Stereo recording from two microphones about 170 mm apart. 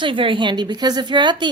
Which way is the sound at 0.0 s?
30° right (ahead or behind).